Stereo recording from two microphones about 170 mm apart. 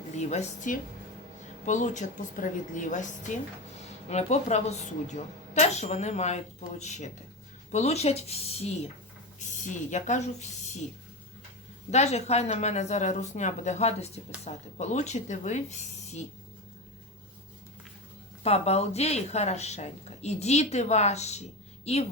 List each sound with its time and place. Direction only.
0.2 s a woman's voice: 45° left (ahead or behind)
11.9 s a woman's voice: 40° left (ahead or behind)
18.4 s speech: 40° left (ahead or behind)